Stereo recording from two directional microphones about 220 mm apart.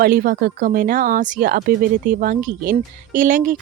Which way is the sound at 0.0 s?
40° right (ahead or behind).